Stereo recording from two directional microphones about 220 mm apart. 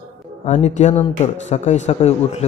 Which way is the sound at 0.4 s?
30° left (ahead or behind).